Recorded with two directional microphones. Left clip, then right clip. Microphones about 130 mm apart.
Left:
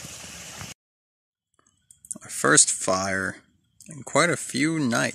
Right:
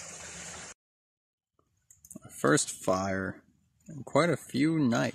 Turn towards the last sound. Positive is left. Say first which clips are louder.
# left 4 dB
turn(degrees=0)  # may be behind; listen again after turning